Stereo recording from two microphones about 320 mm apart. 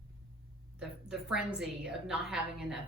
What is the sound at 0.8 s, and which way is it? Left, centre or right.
Speech, centre.